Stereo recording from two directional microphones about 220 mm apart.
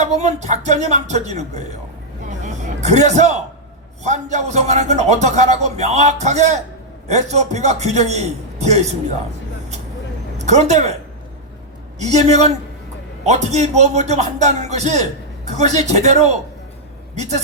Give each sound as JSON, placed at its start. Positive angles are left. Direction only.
{"t": 0.0, "sound": "a man's voice", "side_deg": -30}
{"t": 2.4, "sound": "music", "side_deg": -30}
{"t": 4.0, "sound": "a man's voice", "side_deg": -30}
{"t": 10.3, "sound": "speech", "side_deg": -30}
{"t": 11.9, "sound": "a man's voice", "side_deg": -30}